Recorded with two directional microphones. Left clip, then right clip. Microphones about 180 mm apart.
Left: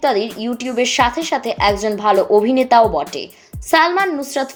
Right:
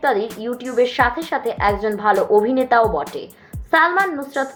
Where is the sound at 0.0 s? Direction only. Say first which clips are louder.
Left 2 dB; 35° left (ahead or behind).